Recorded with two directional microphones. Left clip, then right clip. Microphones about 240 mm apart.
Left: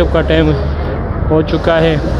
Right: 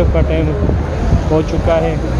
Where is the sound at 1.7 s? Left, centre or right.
Centre.